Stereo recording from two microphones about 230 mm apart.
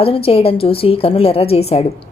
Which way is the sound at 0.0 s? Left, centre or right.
Left.